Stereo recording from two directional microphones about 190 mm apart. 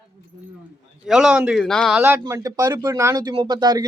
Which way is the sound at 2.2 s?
15° right (ahead or behind).